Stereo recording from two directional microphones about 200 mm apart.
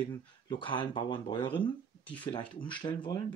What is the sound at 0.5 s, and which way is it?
Speech, 25° left (ahead or behind).